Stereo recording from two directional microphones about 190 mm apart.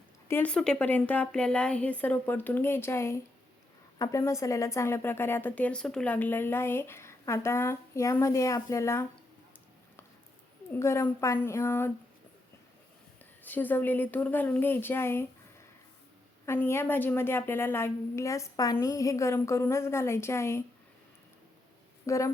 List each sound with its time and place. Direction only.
0.3 s a woman's voice: 10° left (ahead or behind)
10.8 s a woman's voice: 15° left (ahead or behind)
13.4 s a woman's voice: 10° left (ahead or behind)
16.5 s a woman's voice: 15° left (ahead or behind)
22.0 s speech: 15° left (ahead or behind)